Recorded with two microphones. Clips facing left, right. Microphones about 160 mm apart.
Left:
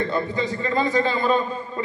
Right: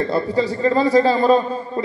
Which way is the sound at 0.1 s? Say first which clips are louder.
Right 5 dB; 35° right (ahead or behind).